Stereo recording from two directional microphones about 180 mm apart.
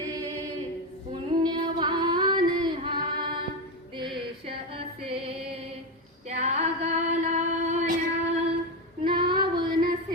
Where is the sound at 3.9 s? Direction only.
30° right (ahead or behind).